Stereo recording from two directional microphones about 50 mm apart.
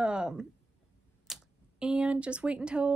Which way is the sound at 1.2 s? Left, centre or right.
Centre.